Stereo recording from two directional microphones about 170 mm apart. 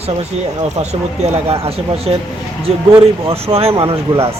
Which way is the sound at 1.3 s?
35° right (ahead or behind).